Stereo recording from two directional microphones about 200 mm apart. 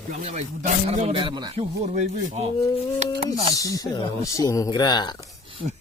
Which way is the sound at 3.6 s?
15° left (ahead or behind).